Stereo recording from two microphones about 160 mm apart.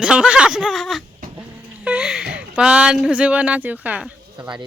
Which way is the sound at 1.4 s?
10° right (ahead or behind).